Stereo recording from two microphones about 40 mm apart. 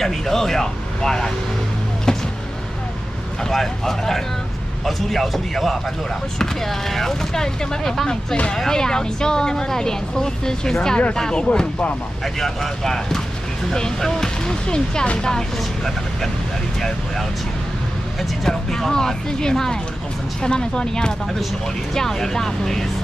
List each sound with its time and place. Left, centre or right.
0.0 s speech: centre
2.1 s vehicle: centre
3.4 s speech: centre
18.4 s speech: centre